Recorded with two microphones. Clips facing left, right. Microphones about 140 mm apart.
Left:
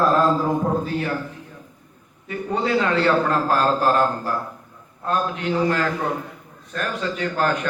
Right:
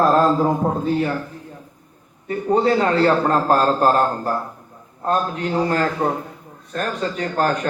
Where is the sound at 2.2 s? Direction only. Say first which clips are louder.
Right 6 dB; 35° right (ahead or behind).